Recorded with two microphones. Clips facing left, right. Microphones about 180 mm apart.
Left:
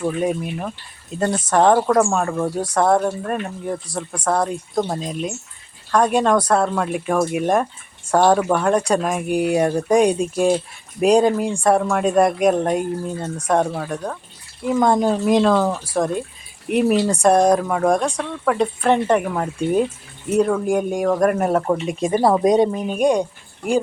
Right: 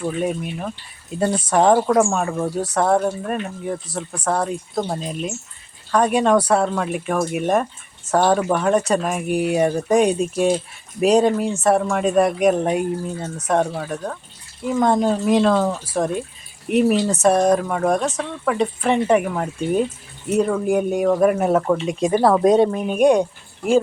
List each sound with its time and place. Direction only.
0.0 s speech: centre (ahead or behind)